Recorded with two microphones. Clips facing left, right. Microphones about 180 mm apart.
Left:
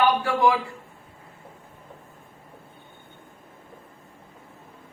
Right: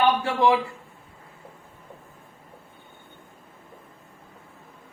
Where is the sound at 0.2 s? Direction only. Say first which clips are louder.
Even; 25° right (ahead or behind).